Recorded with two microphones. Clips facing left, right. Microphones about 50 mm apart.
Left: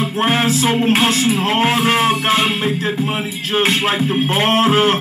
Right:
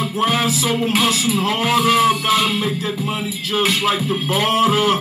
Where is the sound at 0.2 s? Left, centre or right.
Left.